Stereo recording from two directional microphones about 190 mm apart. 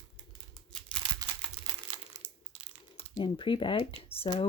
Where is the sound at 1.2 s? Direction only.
20° right (ahead or behind).